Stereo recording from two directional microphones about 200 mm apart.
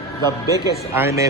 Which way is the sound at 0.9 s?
10° right (ahead or behind).